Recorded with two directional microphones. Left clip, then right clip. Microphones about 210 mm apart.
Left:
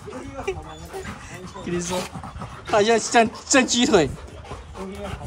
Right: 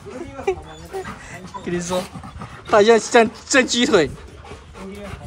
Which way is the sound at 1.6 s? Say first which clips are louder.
Right 3 dB; 10° left (ahead or behind).